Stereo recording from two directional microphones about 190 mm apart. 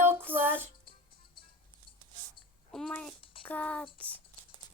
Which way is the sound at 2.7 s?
5° left (ahead or behind).